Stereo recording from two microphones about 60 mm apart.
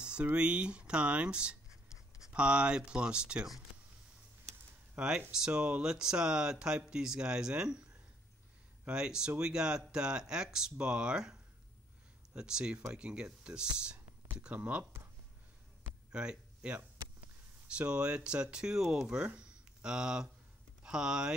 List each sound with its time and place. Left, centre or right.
0.0 s a sound: centre
0.4 s speech: centre
4.9 s speech: centre
8.8 s speech: centre
12.4 s speech: centre
16.1 s a sound: centre
17.7 s speech: centre